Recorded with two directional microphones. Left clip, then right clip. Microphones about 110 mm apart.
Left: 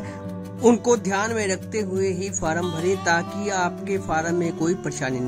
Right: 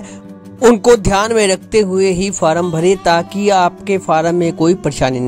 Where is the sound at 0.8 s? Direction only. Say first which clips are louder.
Right 11 dB; 65° right (ahead or behind).